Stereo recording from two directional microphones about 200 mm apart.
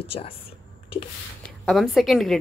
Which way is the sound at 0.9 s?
25° left (ahead or behind).